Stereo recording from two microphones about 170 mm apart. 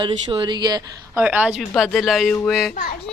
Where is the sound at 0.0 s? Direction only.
30° right (ahead or behind).